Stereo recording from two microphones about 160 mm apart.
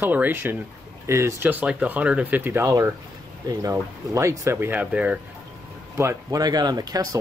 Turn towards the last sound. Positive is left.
turn(degrees=-25)  # may be behind; listen again after turning